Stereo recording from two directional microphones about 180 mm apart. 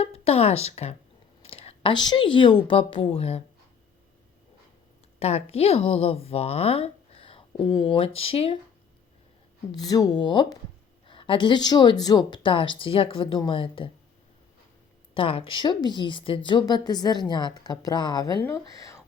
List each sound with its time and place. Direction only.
0.0 s speech: 35° left (ahead or behind)
5.2 s a woman's voice: 35° left (ahead or behind)
9.7 s a woman's voice: 20° left (ahead or behind)
15.1 s a woman's voice: 30° left (ahead or behind)